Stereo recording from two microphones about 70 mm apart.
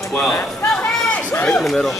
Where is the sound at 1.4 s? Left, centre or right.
Centre.